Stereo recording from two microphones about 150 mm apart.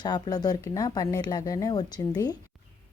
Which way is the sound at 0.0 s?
25° left (ahead or behind).